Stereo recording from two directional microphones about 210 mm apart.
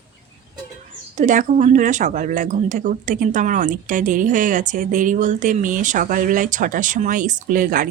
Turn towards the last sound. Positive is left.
turn(degrees=-40)  # may be behind; listen again after turning